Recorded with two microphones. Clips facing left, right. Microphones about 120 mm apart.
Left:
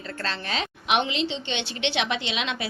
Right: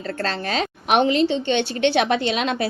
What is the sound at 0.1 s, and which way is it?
A woman's voice, 40° right (ahead or behind).